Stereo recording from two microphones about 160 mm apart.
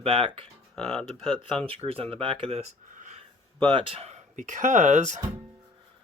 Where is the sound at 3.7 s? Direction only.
35° right (ahead or behind).